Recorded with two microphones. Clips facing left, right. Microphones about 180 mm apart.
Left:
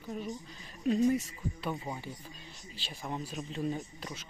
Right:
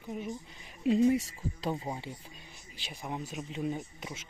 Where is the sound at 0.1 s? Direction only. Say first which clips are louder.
Right 1 dB; 15° right (ahead or behind).